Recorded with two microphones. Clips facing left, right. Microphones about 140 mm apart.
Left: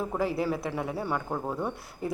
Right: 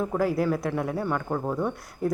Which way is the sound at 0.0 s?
Centre (ahead or behind).